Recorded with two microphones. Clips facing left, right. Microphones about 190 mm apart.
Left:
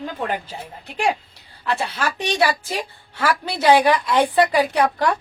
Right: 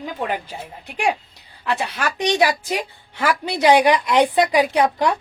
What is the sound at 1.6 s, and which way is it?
A woman's voice, 15° right (ahead or behind).